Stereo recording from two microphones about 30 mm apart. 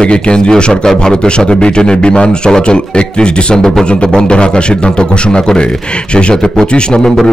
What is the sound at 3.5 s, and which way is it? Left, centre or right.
Speech, centre.